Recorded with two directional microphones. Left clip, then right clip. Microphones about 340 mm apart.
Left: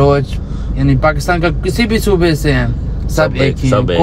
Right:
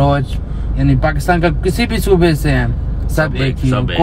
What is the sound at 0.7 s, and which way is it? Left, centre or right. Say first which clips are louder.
Speech: left 3 dB; centre.